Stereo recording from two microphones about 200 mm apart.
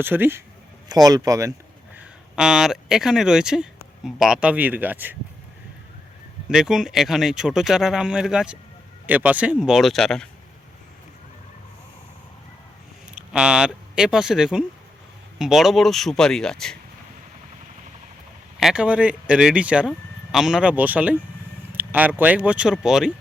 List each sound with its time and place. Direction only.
0.0 s speech: 10° right (ahead or behind)
2.0 s speech: 5° right (ahead or behind)
6.5 s speech: 5° right (ahead or behind)
13.1 s speech: 5° right (ahead or behind)
18.6 s speech: 5° right (ahead or behind)